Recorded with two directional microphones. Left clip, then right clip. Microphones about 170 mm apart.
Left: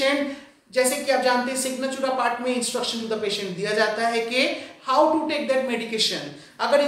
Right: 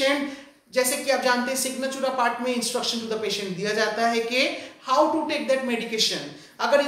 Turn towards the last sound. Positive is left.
turn(degrees=-15)  # may be behind; listen again after turning